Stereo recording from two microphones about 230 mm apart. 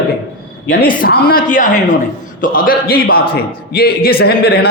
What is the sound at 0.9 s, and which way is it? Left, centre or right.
A man's voice, left.